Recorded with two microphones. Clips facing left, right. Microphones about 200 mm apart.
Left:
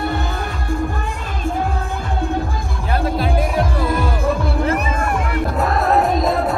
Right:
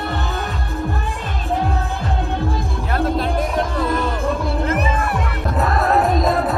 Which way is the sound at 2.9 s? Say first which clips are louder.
Left 1 dB; 5° left (ahead or behind).